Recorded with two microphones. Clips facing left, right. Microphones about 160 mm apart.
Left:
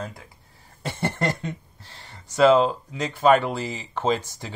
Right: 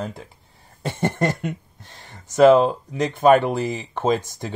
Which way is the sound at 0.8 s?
15° right (ahead or behind).